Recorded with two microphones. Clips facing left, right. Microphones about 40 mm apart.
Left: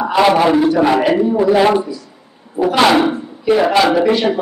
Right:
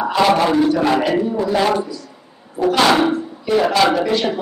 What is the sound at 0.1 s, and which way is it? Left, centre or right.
A man's voice, centre.